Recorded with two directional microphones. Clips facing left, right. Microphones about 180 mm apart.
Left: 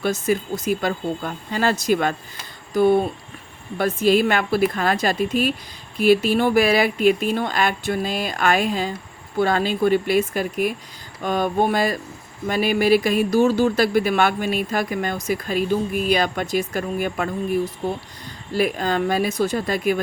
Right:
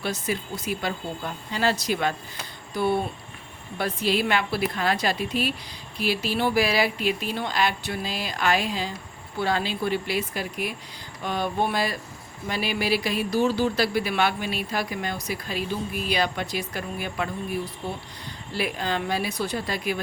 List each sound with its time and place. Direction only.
0.0 s speech: 45° left (ahead or behind)